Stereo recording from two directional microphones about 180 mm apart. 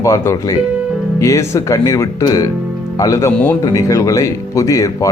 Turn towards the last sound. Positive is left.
turn(degrees=20)  # may be behind; listen again after turning